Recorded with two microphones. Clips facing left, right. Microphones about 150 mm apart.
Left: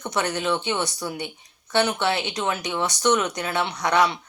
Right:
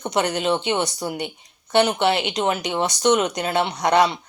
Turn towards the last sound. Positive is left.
turn(degrees=-20)  # may be behind; listen again after turning